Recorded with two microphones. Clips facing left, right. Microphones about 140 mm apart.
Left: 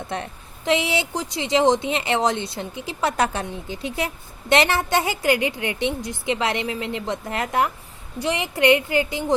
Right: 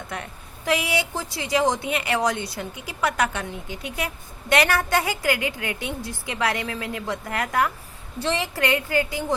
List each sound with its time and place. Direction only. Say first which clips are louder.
0.1 s a woman's voice: left 4 dB; 25° left (ahead or behind)